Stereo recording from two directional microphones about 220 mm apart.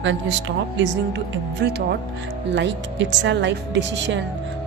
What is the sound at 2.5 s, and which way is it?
Speech, 55° right (ahead or behind).